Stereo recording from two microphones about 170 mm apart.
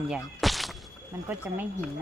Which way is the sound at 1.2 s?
10° right (ahead or behind).